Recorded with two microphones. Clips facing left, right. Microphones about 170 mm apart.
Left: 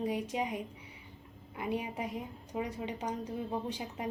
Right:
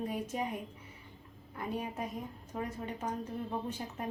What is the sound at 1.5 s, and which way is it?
A woman's voice, 10° left (ahead or behind).